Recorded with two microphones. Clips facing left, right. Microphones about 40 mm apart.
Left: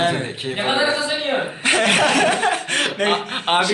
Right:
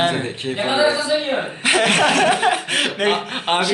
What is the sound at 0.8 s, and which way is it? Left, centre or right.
Speech, left.